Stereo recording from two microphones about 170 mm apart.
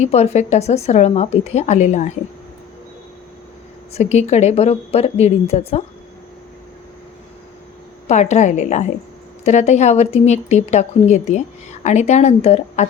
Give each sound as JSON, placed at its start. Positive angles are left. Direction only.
{"t": 0.0, "sound": "speech", "side_deg": 40}
{"t": 3.9, "sound": "speech", "side_deg": 40}
{"t": 8.0, "sound": "a woman's voice", "side_deg": 40}